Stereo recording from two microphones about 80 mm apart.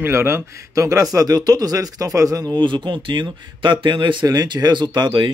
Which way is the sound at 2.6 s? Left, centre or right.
Right.